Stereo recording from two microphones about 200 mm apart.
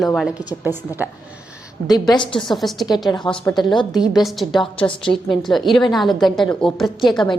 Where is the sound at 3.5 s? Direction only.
25° left (ahead or behind).